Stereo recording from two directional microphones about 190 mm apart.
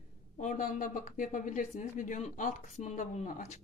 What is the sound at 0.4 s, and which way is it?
Speech, 45° left (ahead or behind).